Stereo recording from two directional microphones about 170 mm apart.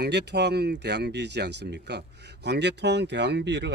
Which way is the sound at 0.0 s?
80° right.